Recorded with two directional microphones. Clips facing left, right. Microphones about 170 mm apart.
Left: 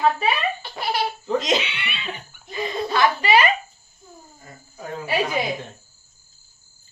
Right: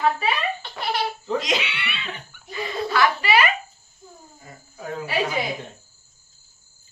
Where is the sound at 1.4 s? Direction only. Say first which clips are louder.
Left 5 dB; 25° left (ahead or behind).